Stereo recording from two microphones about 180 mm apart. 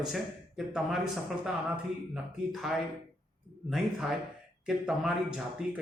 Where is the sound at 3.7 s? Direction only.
Centre (ahead or behind).